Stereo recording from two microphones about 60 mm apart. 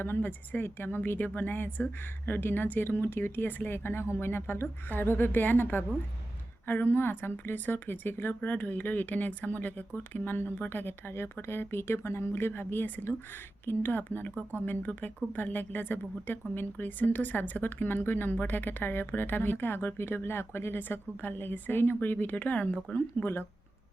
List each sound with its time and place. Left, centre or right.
0.0 s speech: left
23.2 s speech: left